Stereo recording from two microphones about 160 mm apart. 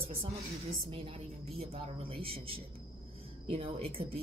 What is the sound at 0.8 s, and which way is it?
A woman's voice, 35° right (ahead or behind).